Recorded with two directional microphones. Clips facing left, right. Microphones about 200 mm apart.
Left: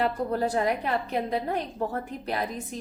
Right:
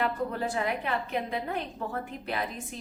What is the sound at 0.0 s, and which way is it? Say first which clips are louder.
A woman's voice: left 4 dB; 40° left (ahead or behind).